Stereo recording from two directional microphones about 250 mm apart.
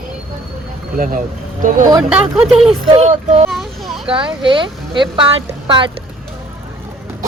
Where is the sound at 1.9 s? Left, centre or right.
Centre.